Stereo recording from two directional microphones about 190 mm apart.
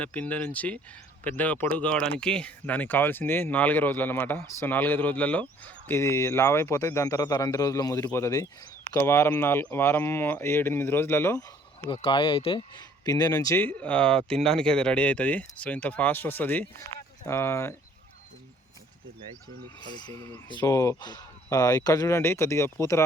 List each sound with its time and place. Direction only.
0.0 s speech: 10° left (ahead or behind)
11.9 s speech: 25° left (ahead or behind)
20.5 s speech: 20° left (ahead or behind)